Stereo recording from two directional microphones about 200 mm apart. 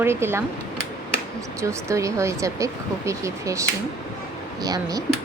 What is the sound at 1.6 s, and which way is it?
Speech, 15° right (ahead or behind).